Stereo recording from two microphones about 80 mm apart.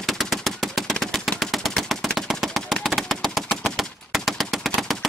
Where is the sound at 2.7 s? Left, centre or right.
Centre.